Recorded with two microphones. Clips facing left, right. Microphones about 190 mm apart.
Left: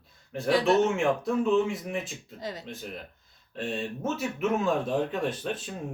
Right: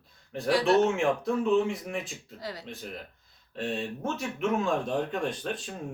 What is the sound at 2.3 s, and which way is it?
Speech, 20° left (ahead or behind).